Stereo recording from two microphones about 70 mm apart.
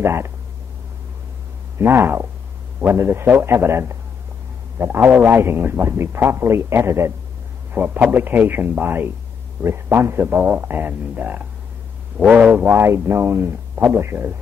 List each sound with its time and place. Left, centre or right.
0.0 s a man's voice: right
1.8 s a man's voice: right; by 12.6 s centre
12.6 s a man's voice: right